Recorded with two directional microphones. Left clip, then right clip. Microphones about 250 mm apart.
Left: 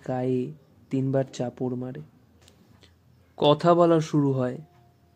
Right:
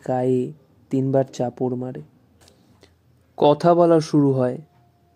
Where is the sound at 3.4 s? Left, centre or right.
Centre.